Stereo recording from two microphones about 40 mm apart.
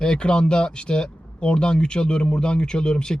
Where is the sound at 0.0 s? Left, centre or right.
Left.